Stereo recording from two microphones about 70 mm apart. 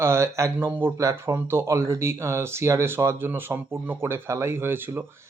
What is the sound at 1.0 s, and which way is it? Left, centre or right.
Speech, right.